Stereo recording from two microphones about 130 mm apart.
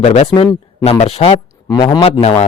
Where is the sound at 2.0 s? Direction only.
50° left (ahead or behind).